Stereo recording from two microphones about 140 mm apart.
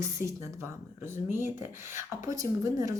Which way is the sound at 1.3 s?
15° right (ahead or behind).